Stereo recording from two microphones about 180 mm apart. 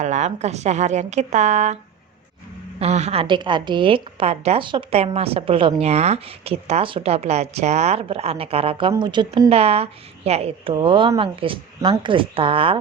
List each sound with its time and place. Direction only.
0.0 s a woman's voice: 40° right (ahead or behind)